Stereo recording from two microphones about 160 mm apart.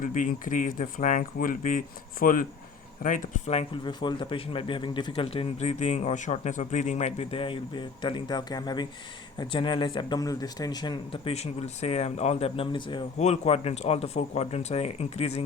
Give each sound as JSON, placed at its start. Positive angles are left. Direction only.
{"t": 0.0, "sound": "speech", "side_deg": 55}
{"t": 13.1, "sound": "speech", "side_deg": 45}